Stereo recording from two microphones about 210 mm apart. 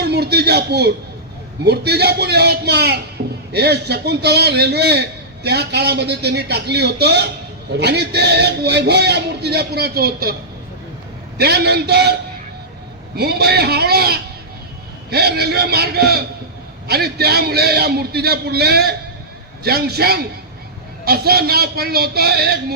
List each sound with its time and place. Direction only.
0.0 s a man's voice: 50° right (ahead or behind)
11.3 s a man's voice: 50° right (ahead or behind)
13.1 s a man's voice: 50° right (ahead or behind)